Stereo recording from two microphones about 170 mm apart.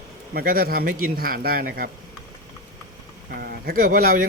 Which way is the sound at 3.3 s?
65° right (ahead or behind).